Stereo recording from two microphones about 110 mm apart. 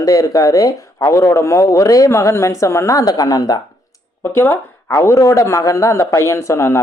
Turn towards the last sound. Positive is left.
turn(degrees=25)  # may be behind; listen again after turning